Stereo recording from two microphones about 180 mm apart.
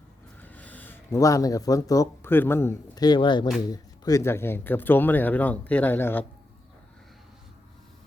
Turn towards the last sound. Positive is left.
turn(degrees=10)  # may be behind; listen again after turning